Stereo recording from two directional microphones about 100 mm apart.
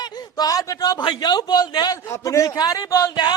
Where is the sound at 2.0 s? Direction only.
30° left (ahead or behind).